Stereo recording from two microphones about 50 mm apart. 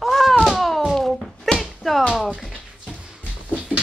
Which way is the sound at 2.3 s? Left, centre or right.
Centre.